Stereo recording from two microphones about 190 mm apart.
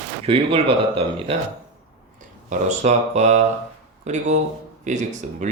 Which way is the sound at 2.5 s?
40° right (ahead or behind).